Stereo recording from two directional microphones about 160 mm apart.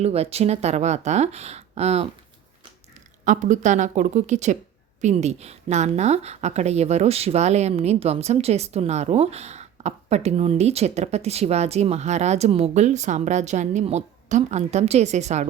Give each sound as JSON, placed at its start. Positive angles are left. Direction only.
{"t": 0.0, "sound": "speech", "side_deg": -40}
{"t": 3.2, "sound": "speech", "side_deg": -50}